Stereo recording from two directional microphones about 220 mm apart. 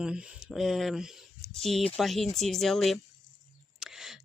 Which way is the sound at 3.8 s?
Centre (ahead or behind).